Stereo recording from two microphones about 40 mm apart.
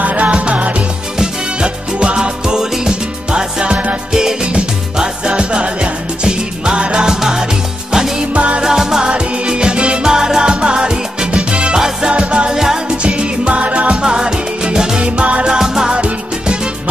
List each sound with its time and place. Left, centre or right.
0.0 s music: right
0.3 s music: right; by 7.4 s centre
8.3 s music: right
8.6 s music: centre
12.1 s music: right
12.5 s music: centre
12.9 s music: right
14.0 s music: centre
15.0 s music: right
15.4 s music: centre